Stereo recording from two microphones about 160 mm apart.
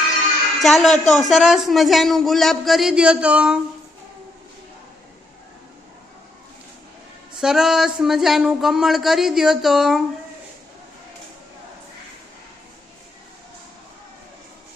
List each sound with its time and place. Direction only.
0.6 s speech: centre (ahead or behind)
7.4 s speech: centre (ahead or behind)